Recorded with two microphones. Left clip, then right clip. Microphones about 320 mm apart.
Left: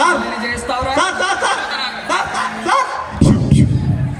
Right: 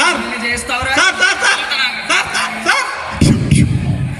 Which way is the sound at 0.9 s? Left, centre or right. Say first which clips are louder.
Right 5 dB; left.